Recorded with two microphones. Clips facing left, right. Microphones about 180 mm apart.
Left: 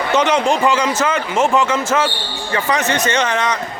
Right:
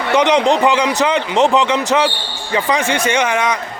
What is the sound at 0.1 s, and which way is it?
Speech, 15° right (ahead or behind).